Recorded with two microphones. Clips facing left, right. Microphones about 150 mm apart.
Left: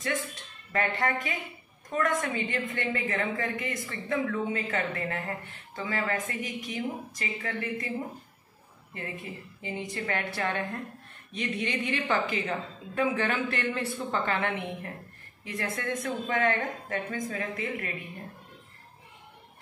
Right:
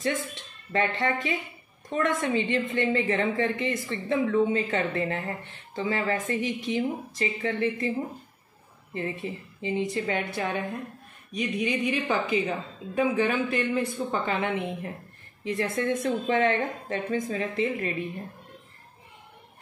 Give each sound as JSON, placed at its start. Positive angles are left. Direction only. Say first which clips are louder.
{"t": 0.0, "sound": "a woman's voice", "louder": "right 3 dB", "side_deg": -25}
{"t": 8.9, "sound": "a woman's voice", "louder": "right 7 dB", "side_deg": -25}
{"t": 11.9, "sound": "a woman's voice", "louder": "right 3 dB", "side_deg": -15}